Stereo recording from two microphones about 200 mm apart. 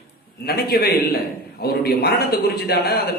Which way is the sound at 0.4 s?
50° left (ahead or behind).